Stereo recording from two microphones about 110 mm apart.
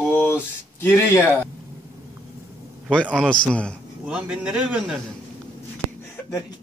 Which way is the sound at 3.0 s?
10° right (ahead or behind).